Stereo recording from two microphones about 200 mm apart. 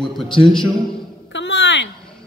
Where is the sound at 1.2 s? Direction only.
60° left (ahead or behind).